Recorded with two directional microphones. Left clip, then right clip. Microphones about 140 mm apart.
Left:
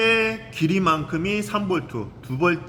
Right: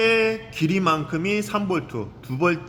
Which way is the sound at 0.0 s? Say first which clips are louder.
Even; 30° right (ahead or behind).